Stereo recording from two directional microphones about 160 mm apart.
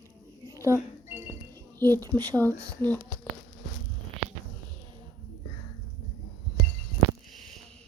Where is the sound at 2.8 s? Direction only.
10° left (ahead or behind).